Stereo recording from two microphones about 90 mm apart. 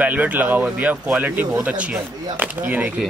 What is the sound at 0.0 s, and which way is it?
A man's voice, 20° right (ahead or behind).